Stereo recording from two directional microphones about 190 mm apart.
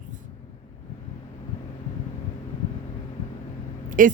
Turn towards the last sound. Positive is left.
turn(degrees=-45)  # may be behind; listen again after turning